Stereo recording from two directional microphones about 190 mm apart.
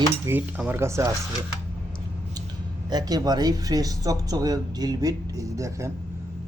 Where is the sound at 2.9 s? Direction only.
20° right (ahead or behind).